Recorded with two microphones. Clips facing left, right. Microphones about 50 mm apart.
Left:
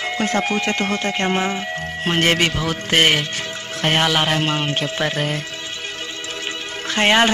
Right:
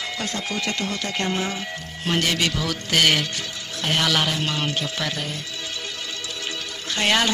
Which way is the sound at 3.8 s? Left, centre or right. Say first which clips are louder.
Left 5 dB; left.